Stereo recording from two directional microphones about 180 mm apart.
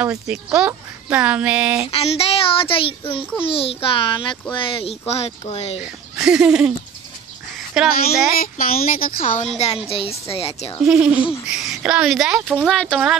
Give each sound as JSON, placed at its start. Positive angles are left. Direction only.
{"t": 0.0, "sound": "speech", "side_deg": -10}
{"t": 1.9, "sound": "a child's voice", "side_deg": 35}
{"t": 5.8, "sound": "speech", "side_deg": -5}
{"t": 7.7, "sound": "speech", "side_deg": 0}
{"t": 8.4, "sound": "speech", "side_deg": 55}
{"t": 9.8, "sound": "a child's voice", "side_deg": 35}
{"t": 10.9, "sound": "speech", "side_deg": -5}